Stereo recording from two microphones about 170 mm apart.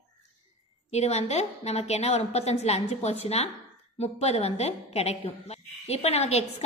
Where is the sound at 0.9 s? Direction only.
40° left (ahead or behind).